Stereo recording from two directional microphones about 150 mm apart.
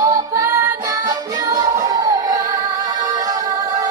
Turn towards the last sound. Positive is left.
turn(degrees=-25)  # may be behind; listen again after turning